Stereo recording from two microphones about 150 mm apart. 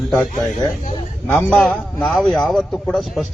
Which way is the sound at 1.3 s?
10° left (ahead or behind).